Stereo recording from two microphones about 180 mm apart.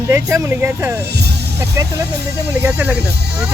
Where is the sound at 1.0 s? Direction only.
65° right (ahead or behind).